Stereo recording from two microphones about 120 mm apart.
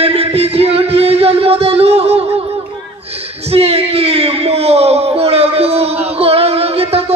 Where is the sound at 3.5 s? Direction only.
55° right (ahead or behind).